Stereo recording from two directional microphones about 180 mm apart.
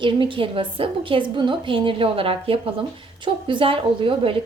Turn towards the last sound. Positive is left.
turn(degrees=-30)  # may be behind; listen again after turning